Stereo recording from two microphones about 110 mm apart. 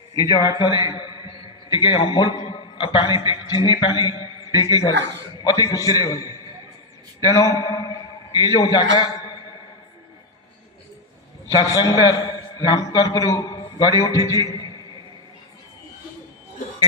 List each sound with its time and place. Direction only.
0.2 s a man's voice: 35° left (ahead or behind)
11.6 s a man's voice: 35° left (ahead or behind)